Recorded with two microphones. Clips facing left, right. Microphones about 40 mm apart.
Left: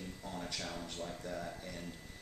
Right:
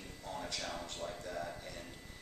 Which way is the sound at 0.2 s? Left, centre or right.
Centre.